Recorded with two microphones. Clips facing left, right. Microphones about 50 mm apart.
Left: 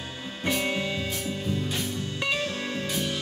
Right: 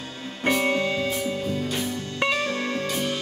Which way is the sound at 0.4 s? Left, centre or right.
Right.